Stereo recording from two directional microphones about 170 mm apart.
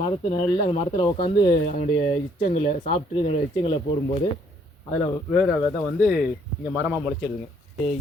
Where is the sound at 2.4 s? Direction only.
45° left (ahead or behind).